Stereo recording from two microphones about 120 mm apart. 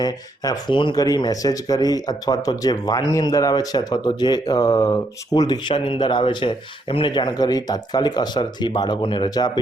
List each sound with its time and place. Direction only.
0.0 s speech: 35° left (ahead or behind)